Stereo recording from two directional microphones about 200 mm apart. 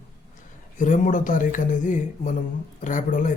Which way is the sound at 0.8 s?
40° left (ahead or behind).